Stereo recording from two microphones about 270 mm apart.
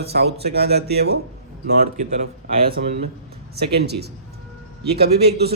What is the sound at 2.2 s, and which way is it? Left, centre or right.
Speech, right.